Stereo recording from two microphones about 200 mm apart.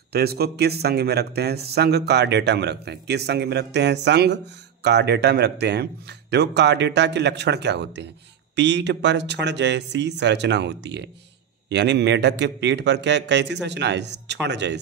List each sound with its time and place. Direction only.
0.1 s speech: 50° right (ahead or behind)